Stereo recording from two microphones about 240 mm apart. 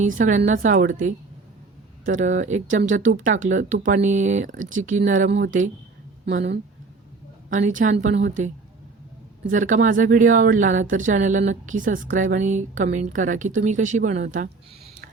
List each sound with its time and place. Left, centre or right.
0.0 s speech: right
5.3 s speech: right
7.5 s speech: right